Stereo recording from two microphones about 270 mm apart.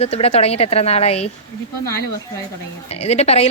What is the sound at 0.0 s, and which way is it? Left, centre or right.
A woman's voice, left.